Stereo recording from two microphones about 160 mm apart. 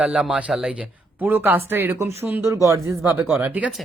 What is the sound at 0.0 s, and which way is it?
Speech, 5° right (ahead or behind).